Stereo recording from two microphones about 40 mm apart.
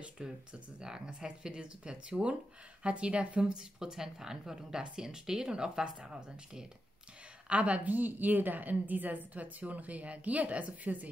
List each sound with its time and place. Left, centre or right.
0.0 s speech: right
7.4 s a woman's voice: right